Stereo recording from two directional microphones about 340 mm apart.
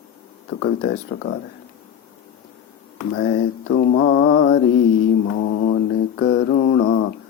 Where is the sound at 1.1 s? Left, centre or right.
Left.